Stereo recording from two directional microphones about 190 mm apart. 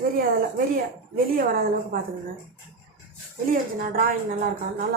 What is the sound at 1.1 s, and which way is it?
Speech, 50° right (ahead or behind).